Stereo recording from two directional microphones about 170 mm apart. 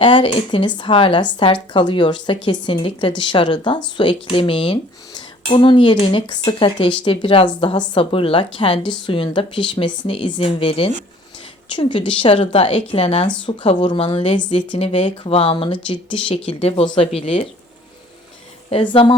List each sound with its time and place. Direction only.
0.0 s a woman's voice: 30° left (ahead or behind)
18.7 s a woman's voice: 35° left (ahead or behind)